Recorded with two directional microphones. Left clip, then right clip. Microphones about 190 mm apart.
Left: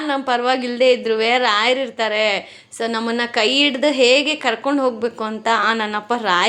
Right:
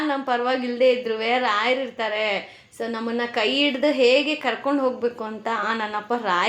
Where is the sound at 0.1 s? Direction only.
30° left (ahead or behind).